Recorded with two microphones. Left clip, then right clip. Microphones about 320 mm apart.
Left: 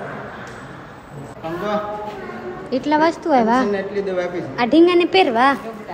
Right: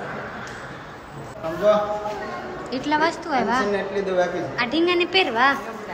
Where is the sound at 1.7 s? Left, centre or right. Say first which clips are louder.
Right 6 dB; centre.